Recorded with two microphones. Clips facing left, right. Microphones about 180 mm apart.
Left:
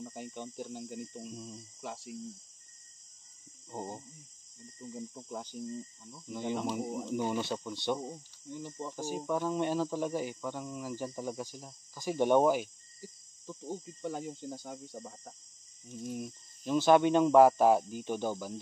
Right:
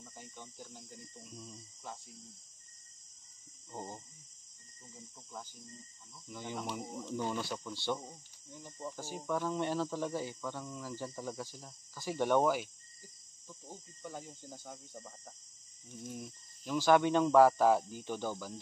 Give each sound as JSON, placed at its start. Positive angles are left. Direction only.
{"t": 0.0, "sound": "speech", "side_deg": 70}
{"t": 1.2, "sound": "speech", "side_deg": 15}
{"t": 1.8, "sound": "speech", "side_deg": 80}
{"t": 3.7, "sound": "speech", "side_deg": 20}
{"t": 4.8, "sound": "speech", "side_deg": 70}
{"t": 6.2, "sound": "speech", "side_deg": 20}
{"t": 8.5, "sound": "speech", "side_deg": 80}
{"t": 8.9, "sound": "speech", "side_deg": 15}
{"t": 13.0, "sound": "speech", "side_deg": 80}
{"t": 15.9, "sound": "speech", "side_deg": 20}